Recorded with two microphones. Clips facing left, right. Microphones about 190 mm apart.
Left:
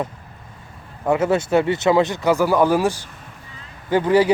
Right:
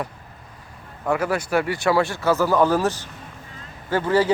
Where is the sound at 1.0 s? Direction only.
20° left (ahead or behind).